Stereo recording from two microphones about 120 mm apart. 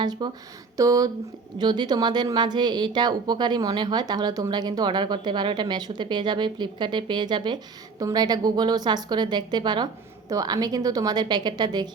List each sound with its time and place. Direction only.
0.0 s speech: 35° right (ahead or behind)